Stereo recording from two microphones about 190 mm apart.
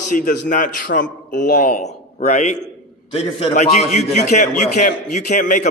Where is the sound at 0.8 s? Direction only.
55° left (ahead or behind).